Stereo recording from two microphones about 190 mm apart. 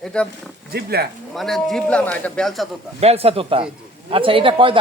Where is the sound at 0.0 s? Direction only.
5° left (ahead or behind).